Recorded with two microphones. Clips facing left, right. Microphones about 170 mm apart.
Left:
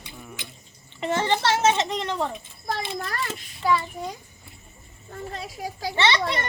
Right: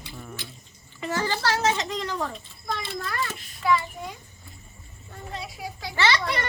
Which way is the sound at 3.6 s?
35° left (ahead or behind).